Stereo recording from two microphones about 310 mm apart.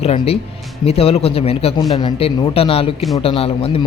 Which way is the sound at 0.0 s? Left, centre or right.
Centre.